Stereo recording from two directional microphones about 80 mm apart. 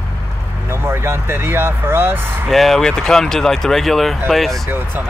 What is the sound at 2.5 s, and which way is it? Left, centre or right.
Speech, centre.